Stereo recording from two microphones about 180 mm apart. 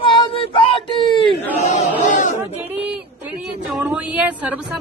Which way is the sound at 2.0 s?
45° left (ahead or behind).